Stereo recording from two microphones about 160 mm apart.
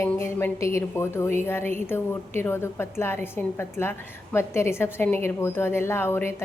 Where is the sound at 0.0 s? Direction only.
15° left (ahead or behind).